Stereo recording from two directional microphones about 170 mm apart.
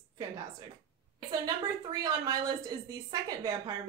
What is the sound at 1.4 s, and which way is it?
A woman's voice, 20° right (ahead or behind).